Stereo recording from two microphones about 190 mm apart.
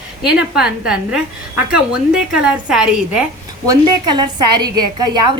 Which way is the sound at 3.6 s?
20° right (ahead or behind).